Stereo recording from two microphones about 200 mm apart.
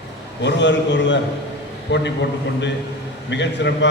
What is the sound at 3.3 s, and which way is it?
Speech, 60° left (ahead or behind).